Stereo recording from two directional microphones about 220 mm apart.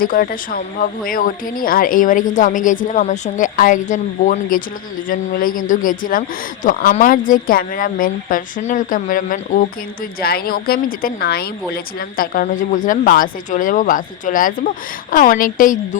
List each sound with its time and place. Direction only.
0.0 s a woman's voice: 40° left (ahead or behind)